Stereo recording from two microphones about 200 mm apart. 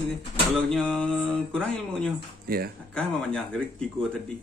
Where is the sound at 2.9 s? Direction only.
5° left (ahead or behind).